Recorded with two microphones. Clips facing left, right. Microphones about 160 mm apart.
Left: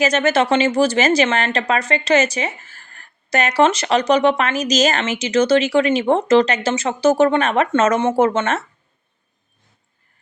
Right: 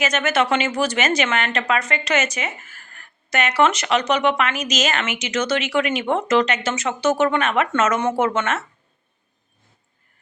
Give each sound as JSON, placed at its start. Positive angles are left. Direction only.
{"t": 0.0, "sound": "speech", "side_deg": 30}